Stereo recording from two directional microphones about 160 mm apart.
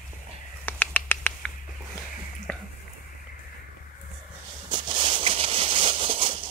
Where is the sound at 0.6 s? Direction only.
10° left (ahead or behind).